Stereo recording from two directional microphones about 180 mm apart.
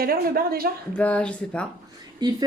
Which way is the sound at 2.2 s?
25° right (ahead or behind).